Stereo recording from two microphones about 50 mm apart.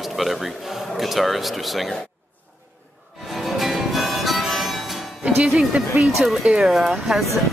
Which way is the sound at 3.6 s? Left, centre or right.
Centre.